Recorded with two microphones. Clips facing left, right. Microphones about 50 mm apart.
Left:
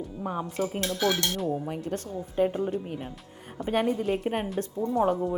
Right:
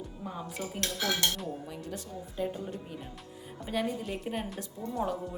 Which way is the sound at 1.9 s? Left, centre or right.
Left.